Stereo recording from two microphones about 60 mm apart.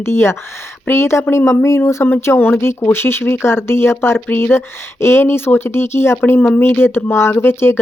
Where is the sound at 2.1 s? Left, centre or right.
Left.